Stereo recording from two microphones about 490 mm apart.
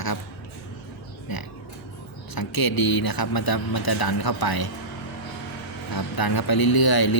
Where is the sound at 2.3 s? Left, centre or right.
Left.